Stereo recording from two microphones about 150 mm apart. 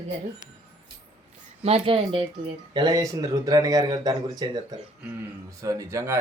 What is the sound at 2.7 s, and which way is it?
A man's voice, 25° right (ahead or behind).